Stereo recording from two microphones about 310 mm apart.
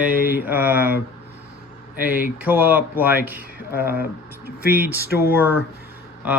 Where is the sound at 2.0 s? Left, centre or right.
Centre.